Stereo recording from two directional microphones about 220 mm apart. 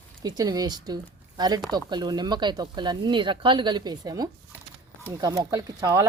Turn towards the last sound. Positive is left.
turn(degrees=-15)  # may be behind; listen again after turning